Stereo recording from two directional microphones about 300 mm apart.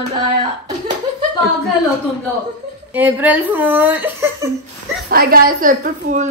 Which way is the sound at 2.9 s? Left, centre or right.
Centre.